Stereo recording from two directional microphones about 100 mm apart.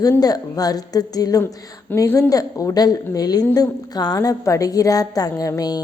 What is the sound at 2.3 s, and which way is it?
A woman's voice, 35° left (ahead or behind).